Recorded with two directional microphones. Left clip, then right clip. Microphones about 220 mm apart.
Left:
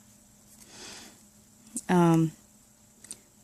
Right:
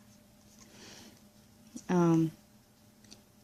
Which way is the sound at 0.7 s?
40° left (ahead or behind).